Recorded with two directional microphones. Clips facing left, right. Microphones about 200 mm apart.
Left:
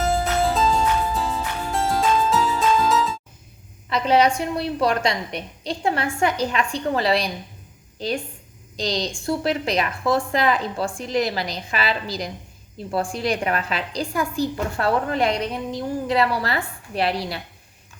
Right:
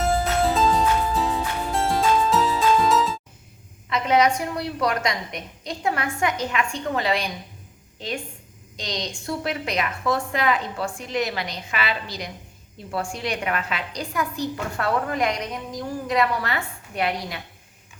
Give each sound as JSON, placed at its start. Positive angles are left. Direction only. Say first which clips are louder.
{"t": 0.0, "sound": "music", "louder": "even", "side_deg": 0}
{"t": 3.8, "sound": "a woman's voice", "louder": "left 2 dB", "side_deg": 35}